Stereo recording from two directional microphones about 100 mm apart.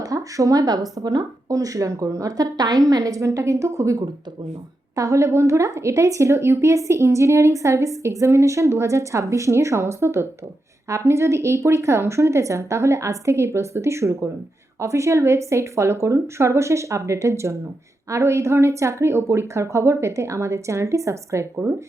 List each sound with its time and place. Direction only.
0.0 s a woman's voice: 35° right (ahead or behind)
4.9 s speech: 30° right (ahead or behind)